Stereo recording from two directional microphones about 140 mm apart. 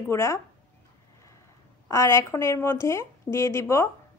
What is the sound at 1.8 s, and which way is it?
A woman's voice, 20° left (ahead or behind).